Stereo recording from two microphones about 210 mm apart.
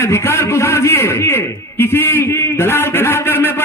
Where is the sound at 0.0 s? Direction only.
10° left (ahead or behind).